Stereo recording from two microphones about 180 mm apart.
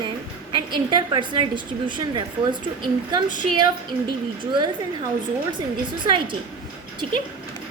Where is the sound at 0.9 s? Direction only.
25° right (ahead or behind).